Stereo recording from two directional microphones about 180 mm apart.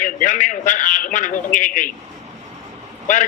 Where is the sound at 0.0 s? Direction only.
45° left (ahead or behind).